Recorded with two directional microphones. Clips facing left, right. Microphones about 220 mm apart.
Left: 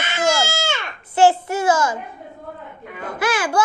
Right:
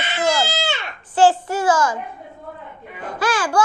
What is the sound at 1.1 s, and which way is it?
Speech, 25° left (ahead or behind).